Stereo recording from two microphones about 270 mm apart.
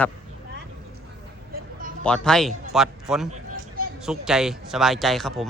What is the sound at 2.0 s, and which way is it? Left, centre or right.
Speech, centre.